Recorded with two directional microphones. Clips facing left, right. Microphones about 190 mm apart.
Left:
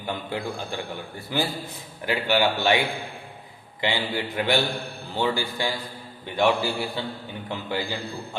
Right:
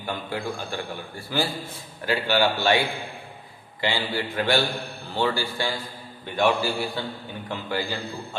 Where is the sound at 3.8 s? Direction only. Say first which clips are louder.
Even; 20° left (ahead or behind).